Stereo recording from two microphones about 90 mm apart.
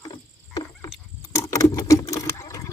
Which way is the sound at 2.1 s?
35° left (ahead or behind).